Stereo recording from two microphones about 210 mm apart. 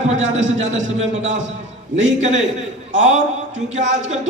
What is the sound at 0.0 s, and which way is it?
A man's voice, 35° right (ahead or behind).